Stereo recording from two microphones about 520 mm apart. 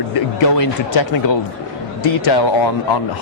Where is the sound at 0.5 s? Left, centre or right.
Left.